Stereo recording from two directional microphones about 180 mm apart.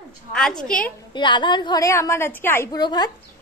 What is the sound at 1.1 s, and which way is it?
A woman's voice, 25° left (ahead or behind).